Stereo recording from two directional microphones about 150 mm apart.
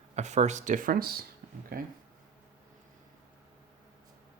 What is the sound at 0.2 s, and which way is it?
Speech, 50° right (ahead or behind).